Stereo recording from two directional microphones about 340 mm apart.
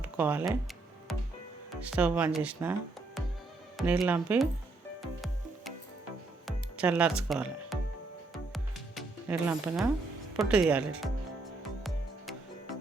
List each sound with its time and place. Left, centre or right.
0.0 s speech: centre
1.9 s speech: centre
3.8 s speech: centre
6.7 s speech: centre
8.5 s music: centre
10.3 s speech: centre